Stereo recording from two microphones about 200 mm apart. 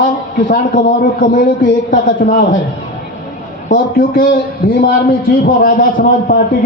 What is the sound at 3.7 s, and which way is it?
A man's voice, 45° left (ahead or behind).